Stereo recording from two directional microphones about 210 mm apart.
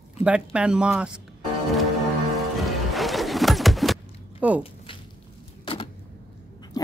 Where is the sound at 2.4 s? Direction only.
Centre (ahead or behind).